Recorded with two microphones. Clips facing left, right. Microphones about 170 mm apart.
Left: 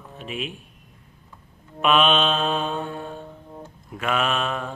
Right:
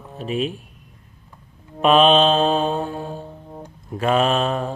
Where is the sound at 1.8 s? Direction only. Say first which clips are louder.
Right 6 dB; 35° right (ahead or behind).